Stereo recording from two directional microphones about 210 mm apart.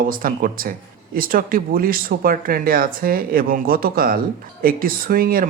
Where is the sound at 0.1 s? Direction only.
40° right (ahead or behind).